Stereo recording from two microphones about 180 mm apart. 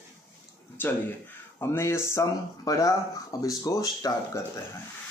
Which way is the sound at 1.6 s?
15° left (ahead or behind).